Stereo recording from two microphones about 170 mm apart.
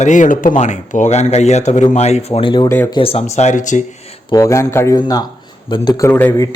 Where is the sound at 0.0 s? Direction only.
45° left (ahead or behind).